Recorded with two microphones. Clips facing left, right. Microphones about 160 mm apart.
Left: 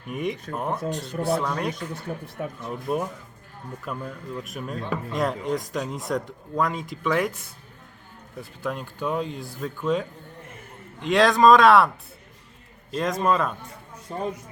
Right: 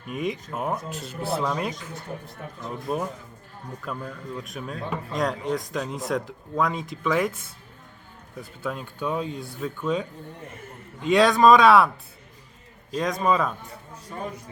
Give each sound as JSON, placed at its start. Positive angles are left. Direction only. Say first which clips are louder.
{"t": 0.1, "sound": "speech", "louder": "even", "side_deg": 0}
{"t": 12.9, "sound": "speech", "louder": "even", "side_deg": 0}